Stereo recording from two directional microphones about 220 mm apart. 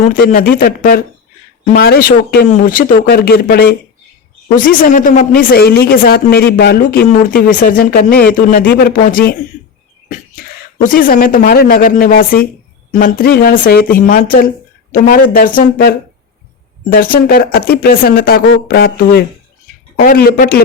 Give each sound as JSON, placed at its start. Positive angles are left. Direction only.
{"t": 0.0, "sound": "speech", "side_deg": 35}
{"t": 10.8, "sound": "speech", "side_deg": 40}